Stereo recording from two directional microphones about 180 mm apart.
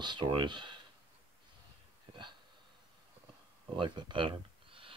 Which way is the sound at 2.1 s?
30° right (ahead or behind).